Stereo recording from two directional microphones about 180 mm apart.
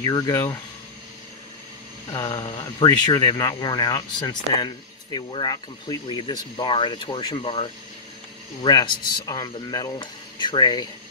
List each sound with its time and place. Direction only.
0.0 s speech: 20° left (ahead or behind)
2.1 s speech: 20° left (ahead or behind)